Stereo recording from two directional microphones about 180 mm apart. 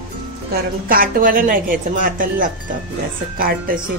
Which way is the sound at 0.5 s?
55° right (ahead or behind).